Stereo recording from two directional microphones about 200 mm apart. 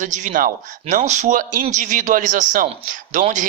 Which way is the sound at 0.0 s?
40° right (ahead or behind).